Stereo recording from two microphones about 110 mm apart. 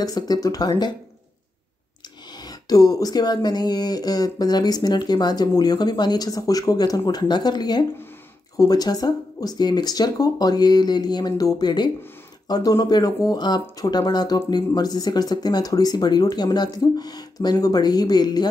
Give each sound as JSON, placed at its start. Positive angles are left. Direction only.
{"t": 0.0, "sound": "speech", "side_deg": 35}
{"t": 2.3, "sound": "speech", "side_deg": 35}